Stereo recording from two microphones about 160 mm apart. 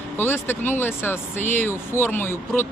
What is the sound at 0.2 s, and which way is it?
Speech, 15° left (ahead or behind).